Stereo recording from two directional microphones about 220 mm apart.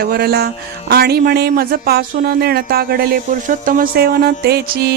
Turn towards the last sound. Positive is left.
turn(degrees=-45)  # may be behind; listen again after turning